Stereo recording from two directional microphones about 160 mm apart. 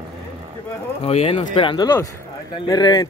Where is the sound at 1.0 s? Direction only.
35° left (ahead or behind).